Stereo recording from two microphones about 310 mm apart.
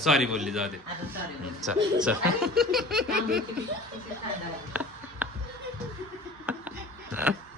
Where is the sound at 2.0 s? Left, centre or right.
Centre.